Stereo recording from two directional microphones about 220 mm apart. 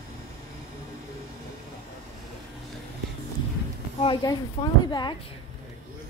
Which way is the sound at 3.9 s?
20° left (ahead or behind).